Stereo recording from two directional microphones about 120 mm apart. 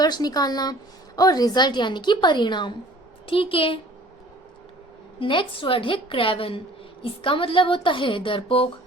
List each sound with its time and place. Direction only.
0.0 s a woman's voice: 35° left (ahead or behind)
5.2 s a woman's voice: 45° left (ahead or behind)